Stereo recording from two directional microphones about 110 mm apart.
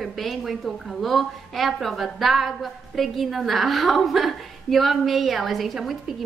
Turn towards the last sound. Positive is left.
turn(degrees=0)  # may be behind; listen again after turning